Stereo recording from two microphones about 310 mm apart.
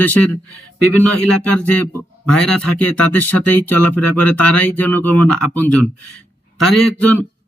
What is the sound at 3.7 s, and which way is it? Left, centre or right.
Speech, left.